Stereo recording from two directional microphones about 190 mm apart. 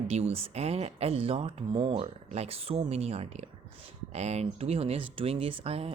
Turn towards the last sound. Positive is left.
turn(degrees=-30)  # may be behind; listen again after turning